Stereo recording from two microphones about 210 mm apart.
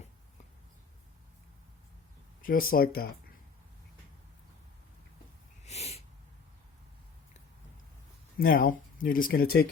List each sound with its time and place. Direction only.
2.4 s speech: 40° left (ahead or behind)
5.6 s a sound: 30° left (ahead or behind)
8.4 s speech: 45° left (ahead or behind)